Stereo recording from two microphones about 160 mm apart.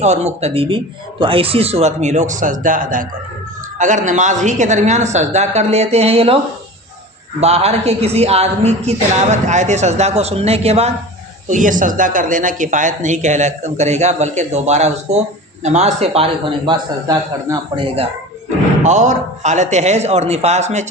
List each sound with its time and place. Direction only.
0.0 s a woman's voice: 45° right (ahead or behind)
7.4 s a woman's voice: 40° right (ahead or behind)
11.4 s a woman's voice: 55° right (ahead or behind); by 17.8 s 25° right (ahead or behind)
18.8 s speech: 45° right (ahead or behind)